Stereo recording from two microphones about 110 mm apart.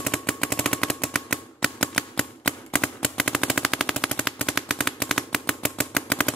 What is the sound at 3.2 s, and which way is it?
Machine gun, centre (ahead or behind).